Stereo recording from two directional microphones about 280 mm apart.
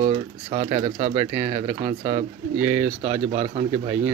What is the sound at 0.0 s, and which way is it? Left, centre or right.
Speech, right.